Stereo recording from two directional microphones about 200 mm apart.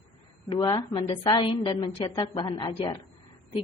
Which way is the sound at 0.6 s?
20° left (ahead or behind).